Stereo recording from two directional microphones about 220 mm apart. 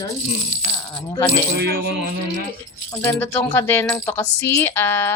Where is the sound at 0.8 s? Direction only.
15° left (ahead or behind).